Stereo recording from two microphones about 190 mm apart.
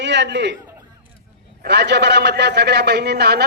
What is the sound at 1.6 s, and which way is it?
A man's voice, 60° right (ahead or behind).